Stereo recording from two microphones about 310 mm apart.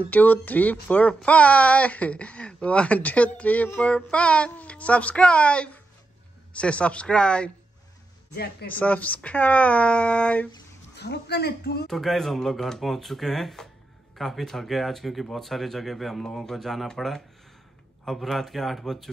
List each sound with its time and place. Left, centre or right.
0.1 s speech: centre
8.3 s a woman's voice: left
8.6 s speech: centre
11.0 s a woman's voice: left
11.9 s speech: centre